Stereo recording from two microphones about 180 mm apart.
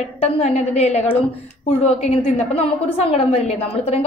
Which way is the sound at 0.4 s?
40° left (ahead or behind).